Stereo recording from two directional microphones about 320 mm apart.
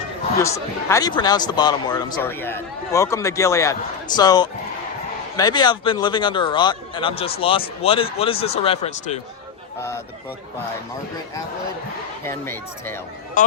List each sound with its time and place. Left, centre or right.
0.4 s a man's voice: centre
12.2 s a man's voice: centre